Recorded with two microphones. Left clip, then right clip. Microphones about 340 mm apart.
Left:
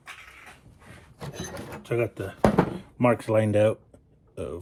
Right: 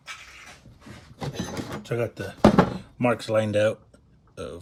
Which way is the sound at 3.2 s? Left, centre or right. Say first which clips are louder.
Even; centre.